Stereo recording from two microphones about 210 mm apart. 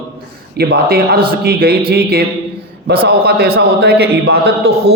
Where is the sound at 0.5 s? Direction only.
45° right (ahead or behind).